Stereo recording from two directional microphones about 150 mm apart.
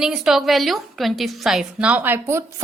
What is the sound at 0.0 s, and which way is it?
A woman's voice, centre (ahead or behind).